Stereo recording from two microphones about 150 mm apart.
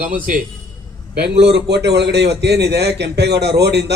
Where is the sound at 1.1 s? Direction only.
90° right.